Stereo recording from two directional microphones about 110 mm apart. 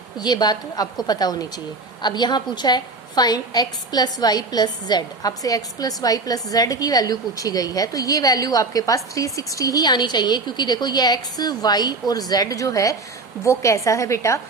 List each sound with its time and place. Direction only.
0.2 s a woman's voice: 40° left (ahead or behind)